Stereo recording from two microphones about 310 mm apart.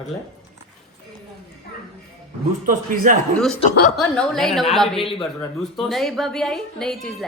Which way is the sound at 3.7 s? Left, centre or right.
Left.